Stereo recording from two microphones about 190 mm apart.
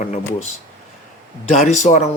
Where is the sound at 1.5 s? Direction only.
40° left (ahead or behind).